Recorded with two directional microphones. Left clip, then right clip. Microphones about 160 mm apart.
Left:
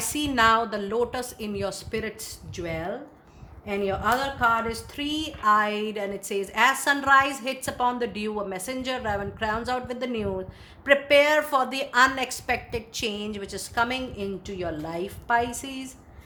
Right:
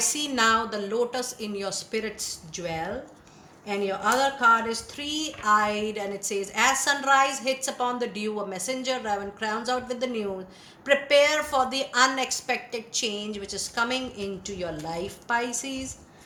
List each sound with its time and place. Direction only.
0.0 s speech: 50° left (ahead or behind)